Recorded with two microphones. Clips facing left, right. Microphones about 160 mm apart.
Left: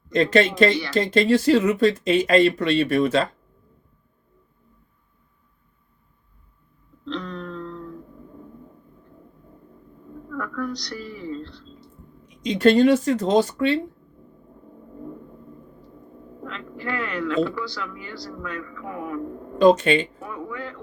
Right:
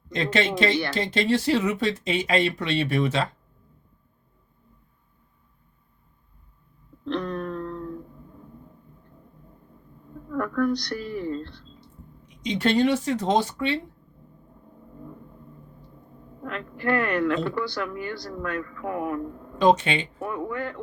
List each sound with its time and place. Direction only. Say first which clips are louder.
0.1 s speech: left 6 dB; 45° left (ahead or behind)
7.1 s a sound: right 3 dB; 55° right (ahead or behind)
10.3 s a woman's voice: right 5 dB; 50° right (ahead or behind)
11.8 s speech: left 2 dB; 45° left (ahead or behind)
16.5 s a man's voice: right 5 dB; 55° right (ahead or behind)
19.5 s speech: left 4 dB; 45° left (ahead or behind)
20.1 s speech: right 4 dB; 55° right (ahead or behind)